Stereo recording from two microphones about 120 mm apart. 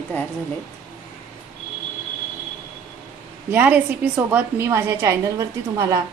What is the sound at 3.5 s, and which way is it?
A woman's voice, 15° right (ahead or behind).